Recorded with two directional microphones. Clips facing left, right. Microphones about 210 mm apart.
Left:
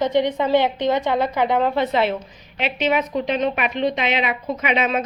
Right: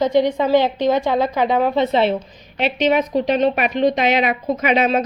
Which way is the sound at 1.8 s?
30° right (ahead or behind).